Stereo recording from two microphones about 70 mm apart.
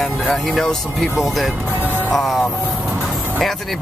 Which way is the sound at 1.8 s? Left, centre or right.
Right.